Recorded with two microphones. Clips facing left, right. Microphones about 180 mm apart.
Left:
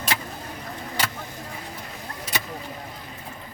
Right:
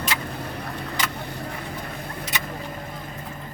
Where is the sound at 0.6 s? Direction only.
65° right (ahead or behind).